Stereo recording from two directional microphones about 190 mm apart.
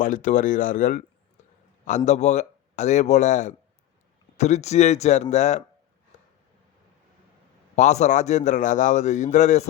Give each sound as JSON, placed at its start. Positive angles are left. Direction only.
{"t": 0.0, "sound": "speech", "side_deg": 40}
{"t": 2.0, "sound": "a man's voice", "side_deg": 35}
{"t": 7.8, "sound": "a man's voice", "side_deg": 40}